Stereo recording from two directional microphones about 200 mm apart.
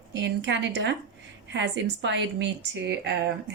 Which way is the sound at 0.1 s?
65° right (ahead or behind).